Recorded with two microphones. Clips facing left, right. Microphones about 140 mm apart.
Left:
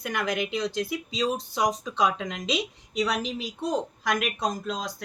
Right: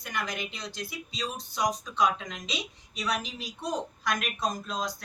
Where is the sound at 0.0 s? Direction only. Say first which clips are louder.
Left 6 dB; 85° left.